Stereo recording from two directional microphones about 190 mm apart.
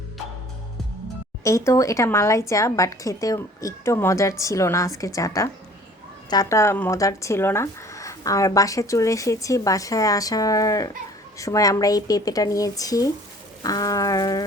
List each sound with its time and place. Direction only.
1.5 s speech: 15° left (ahead or behind)